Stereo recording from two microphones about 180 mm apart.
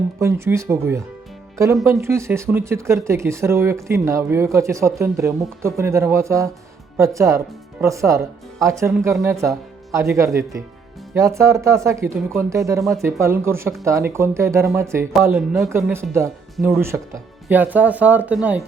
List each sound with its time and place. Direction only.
0.2 s speech: 15° right (ahead or behind)
15.4 s speech: centre (ahead or behind)
15.9 s speech: 15° right (ahead or behind)